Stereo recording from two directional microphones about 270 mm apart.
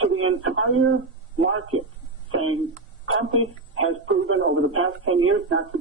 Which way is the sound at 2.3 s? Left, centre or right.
Right.